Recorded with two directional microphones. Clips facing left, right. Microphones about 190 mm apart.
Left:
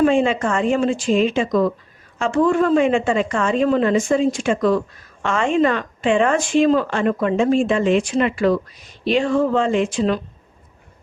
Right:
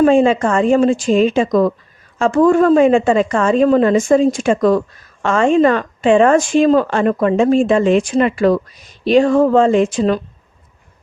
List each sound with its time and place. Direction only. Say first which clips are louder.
0.0 s speech: right 5 dB; 40° right (ahead or behind)